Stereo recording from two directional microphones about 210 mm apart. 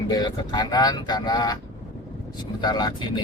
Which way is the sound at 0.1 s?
20° left (ahead or behind).